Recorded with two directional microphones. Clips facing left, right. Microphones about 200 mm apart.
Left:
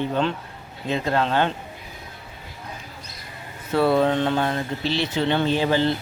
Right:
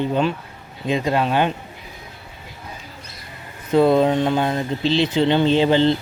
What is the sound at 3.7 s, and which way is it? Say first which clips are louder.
Speech: right 4 dB; 20° right (ahead or behind).